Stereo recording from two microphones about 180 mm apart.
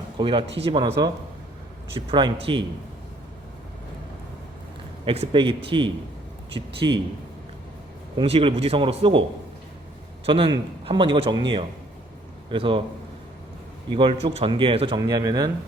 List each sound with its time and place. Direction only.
0.2 s a man's voice: 30° right (ahead or behind)
2.0 s a man's voice: 25° right (ahead or behind)
5.0 s a man's voice: 30° right (ahead or behind)
8.1 s a man's voice: 30° right (ahead or behind)
10.2 s a man's voice: 30° right (ahead or behind)
13.9 s a man's voice: 30° right (ahead or behind)